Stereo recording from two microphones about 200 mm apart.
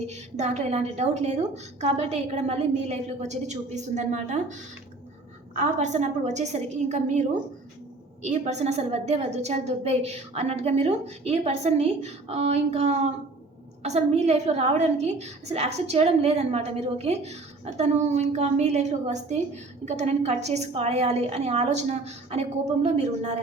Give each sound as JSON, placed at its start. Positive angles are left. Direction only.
{"t": 0.1, "sound": "a woman's voice", "side_deg": -35}
{"t": 5.5, "sound": "a woman's voice", "side_deg": -35}